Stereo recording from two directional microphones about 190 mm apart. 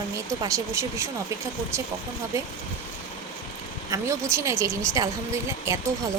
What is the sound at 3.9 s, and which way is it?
Speech, 15° right (ahead or behind).